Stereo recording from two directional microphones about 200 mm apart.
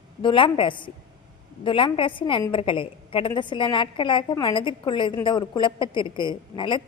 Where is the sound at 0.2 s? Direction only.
25° left (ahead or behind).